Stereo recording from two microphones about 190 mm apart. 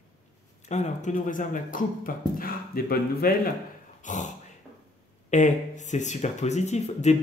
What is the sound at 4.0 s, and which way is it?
Speech, 40° left (ahead or behind).